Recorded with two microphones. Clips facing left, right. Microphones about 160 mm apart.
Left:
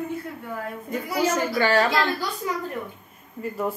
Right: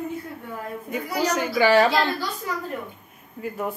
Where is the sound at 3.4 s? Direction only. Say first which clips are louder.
Left 1 dB; centre (ahead or behind).